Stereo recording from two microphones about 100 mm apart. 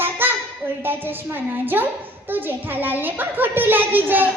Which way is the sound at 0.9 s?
20° right (ahead or behind).